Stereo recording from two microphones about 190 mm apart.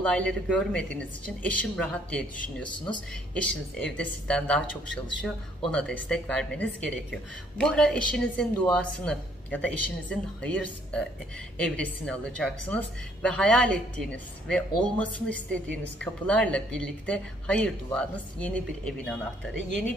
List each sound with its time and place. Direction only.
0.0 s a woman's voice: 5° left (ahead or behind)
3.7 s a woman's voice: 5° left (ahead or behind)